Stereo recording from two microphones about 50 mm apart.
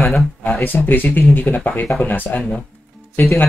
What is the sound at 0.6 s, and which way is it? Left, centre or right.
Speech, left.